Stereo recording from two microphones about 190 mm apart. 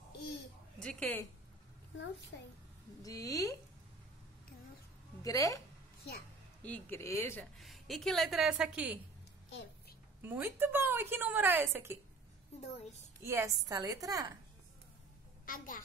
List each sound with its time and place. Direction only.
0.8 s a woman's voice: 5° left (ahead or behind)
3.0 s speech: 20° left (ahead or behind)
5.2 s speech: 20° left (ahead or behind)
6.6 s speech: 10° left (ahead or behind)
7.5 s a woman's voice: centre (ahead or behind)
10.2 s a woman's voice: 10° right (ahead or behind)
13.2 s a woman's voice: 15° right (ahead or behind)
15.4 s a child's voice: 45° left (ahead or behind)